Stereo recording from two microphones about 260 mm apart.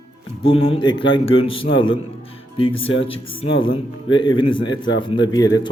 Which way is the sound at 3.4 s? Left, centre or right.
Centre.